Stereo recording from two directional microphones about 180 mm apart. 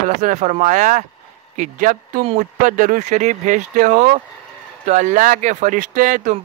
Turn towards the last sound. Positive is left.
turn(degrees=-45)  # may be behind; listen again after turning